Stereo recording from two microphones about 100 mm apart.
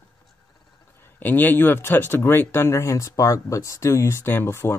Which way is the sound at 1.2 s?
20° left (ahead or behind).